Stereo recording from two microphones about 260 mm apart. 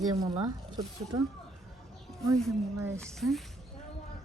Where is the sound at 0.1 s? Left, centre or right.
Centre.